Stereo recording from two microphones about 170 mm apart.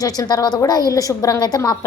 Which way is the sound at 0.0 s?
20° left (ahead or behind).